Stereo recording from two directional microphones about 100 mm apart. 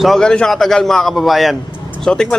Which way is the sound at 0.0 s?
5° left (ahead or behind).